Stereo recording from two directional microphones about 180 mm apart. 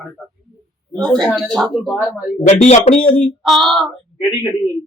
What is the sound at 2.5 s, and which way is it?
Speech, 40° left (ahead or behind).